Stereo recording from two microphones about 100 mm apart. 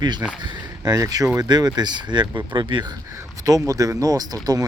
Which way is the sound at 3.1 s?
35° right (ahead or behind).